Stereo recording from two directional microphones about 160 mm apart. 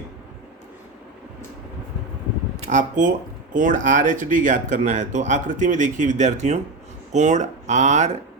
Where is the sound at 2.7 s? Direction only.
50° right (ahead or behind).